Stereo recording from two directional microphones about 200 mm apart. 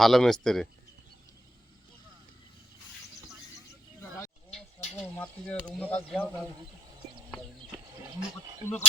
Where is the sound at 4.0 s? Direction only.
5° left (ahead or behind).